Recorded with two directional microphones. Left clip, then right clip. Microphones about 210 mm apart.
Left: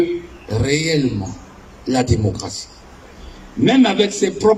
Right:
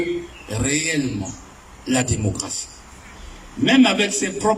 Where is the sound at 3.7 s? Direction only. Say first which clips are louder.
Left 1 dB; 15° left (ahead or behind).